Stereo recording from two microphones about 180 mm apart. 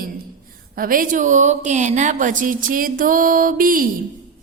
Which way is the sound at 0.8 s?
50° right (ahead or behind).